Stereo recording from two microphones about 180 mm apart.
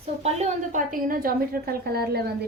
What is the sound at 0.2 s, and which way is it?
A woman's voice, 35° right (ahead or behind).